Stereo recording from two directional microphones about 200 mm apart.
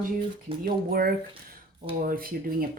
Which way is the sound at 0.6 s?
50° right (ahead or behind).